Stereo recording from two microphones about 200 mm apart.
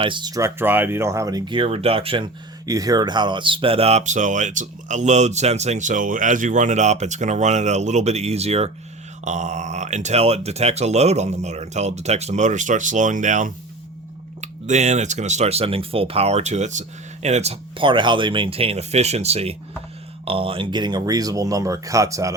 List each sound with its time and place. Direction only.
0.0 s speech: 25° right (ahead or behind)